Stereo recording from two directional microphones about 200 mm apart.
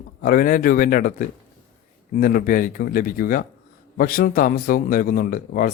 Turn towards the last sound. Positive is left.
turn(degrees=45)  # may be behind; listen again after turning